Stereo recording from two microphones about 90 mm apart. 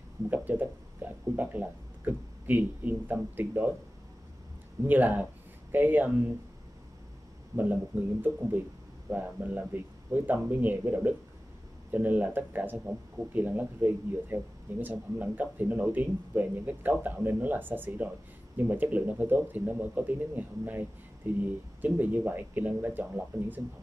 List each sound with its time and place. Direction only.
0.3 s speech: 20° right (ahead or behind)
4.8 s speech: 20° right (ahead or behind)
7.5 s speech: 20° right (ahead or behind)